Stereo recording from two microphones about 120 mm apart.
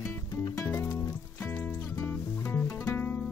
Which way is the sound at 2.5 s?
15° left (ahead or behind).